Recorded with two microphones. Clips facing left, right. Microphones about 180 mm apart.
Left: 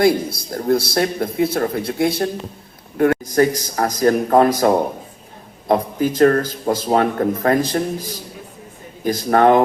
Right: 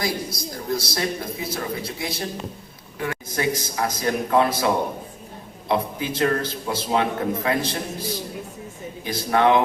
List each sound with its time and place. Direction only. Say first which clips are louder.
0.0 s a man's voice: left 11 dB; 55° left (ahead or behind)
9.0 s a man's voice: left 5 dB; 45° left (ahead or behind)